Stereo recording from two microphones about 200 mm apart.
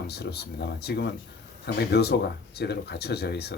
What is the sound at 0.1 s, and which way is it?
Speech, 55° left (ahead or behind).